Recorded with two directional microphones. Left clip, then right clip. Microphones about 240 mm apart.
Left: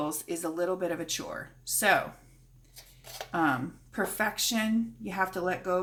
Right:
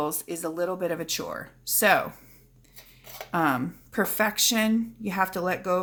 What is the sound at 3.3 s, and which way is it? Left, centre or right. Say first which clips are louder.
Speech: right 3 dB; right.